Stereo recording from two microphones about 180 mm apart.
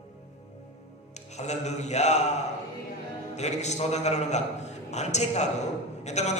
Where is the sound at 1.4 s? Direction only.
40° left (ahead or behind).